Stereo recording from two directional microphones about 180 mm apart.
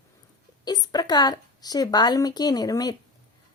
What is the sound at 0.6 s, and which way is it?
A woman's voice, 20° left (ahead or behind).